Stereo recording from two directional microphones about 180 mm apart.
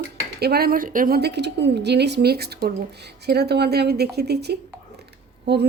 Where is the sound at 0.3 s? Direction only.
60° right (ahead or behind).